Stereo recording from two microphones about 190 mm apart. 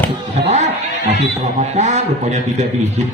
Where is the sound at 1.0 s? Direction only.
35° right (ahead or behind).